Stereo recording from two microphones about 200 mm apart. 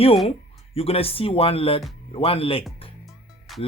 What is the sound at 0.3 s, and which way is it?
Speech, 30° left (ahead or behind).